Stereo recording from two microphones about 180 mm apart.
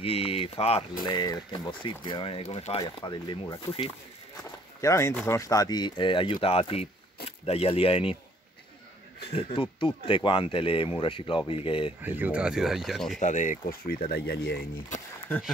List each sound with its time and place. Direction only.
0.0 s speech: 35° left (ahead or behind)
2.8 s speech: 20° left (ahead or behind)
4.8 s speech: 15° left (ahead or behind); by 8.2 s 30° left (ahead or behind)
9.3 s speech: 30° left (ahead or behind)
12.0 s speech: 10° right (ahead or behind)
13.2 s speech: 45° left (ahead or behind); by 14.6 s 65° left (ahead or behind)